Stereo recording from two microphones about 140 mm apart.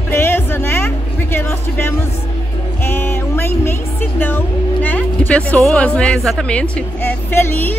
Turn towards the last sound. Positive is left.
turn(degrees=15)  # may be behind; listen again after turning